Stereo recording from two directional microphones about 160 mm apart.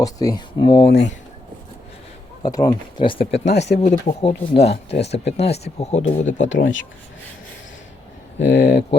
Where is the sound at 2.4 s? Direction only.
25° left (ahead or behind).